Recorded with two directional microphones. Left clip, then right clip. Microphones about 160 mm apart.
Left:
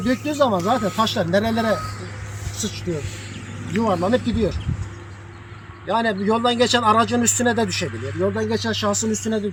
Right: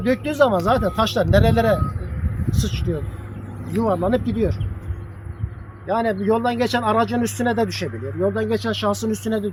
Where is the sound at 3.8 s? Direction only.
50° left (ahead or behind).